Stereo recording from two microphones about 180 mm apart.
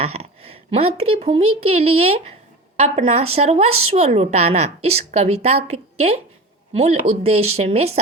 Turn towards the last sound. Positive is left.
turn(degrees=-35)  # may be behind; listen again after turning